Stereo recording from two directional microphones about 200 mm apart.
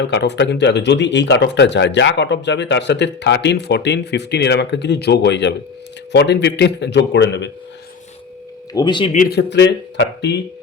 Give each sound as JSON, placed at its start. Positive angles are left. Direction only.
{"t": 0.0, "sound": "speech", "side_deg": 60}
{"t": 8.7, "sound": "speech", "side_deg": 20}
{"t": 9.1, "sound": "speech", "side_deg": 50}